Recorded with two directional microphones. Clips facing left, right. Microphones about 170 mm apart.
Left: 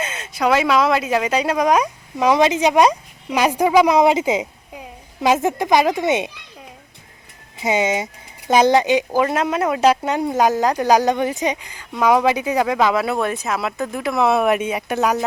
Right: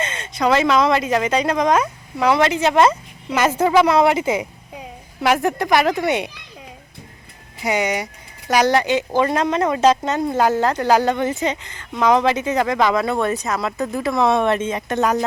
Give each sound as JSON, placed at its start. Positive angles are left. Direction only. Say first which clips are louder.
{"t": 0.0, "sound": "speech", "louder": "even", "side_deg": 10}
{"t": 7.6, "sound": "speech", "louder": "left 2 dB", "side_deg": 20}
{"t": 9.2, "sound": "speech", "louder": "right 1 dB", "side_deg": 5}